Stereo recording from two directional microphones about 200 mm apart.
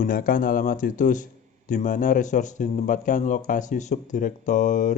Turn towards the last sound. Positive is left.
turn(degrees=40)  # may be behind; listen again after turning